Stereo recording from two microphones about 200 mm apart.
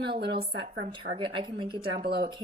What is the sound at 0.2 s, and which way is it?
Speech, 55° right (ahead or behind).